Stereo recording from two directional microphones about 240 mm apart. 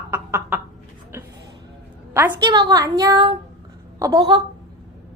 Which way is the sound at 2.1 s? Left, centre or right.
Centre.